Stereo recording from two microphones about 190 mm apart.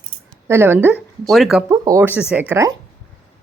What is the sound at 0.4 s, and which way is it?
Speech, 15° right (ahead or behind).